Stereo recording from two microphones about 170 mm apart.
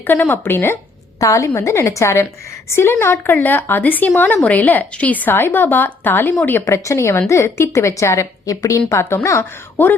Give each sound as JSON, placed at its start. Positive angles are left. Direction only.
{"t": 0.1, "sound": "a woman's voice", "side_deg": 10}